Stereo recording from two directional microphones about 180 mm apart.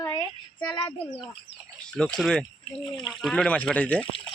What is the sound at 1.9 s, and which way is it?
Speech, 5° left (ahead or behind).